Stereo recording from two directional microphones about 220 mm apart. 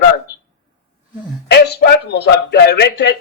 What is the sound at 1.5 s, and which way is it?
Speech, 50° left (ahead or behind).